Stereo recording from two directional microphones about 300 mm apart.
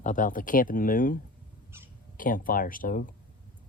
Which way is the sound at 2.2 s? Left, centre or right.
Left.